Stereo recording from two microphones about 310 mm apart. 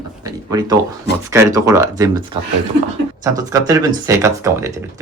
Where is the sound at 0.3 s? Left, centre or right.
Centre.